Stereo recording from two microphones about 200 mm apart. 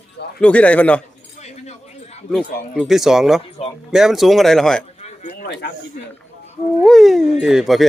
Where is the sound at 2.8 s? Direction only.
Centre (ahead or behind).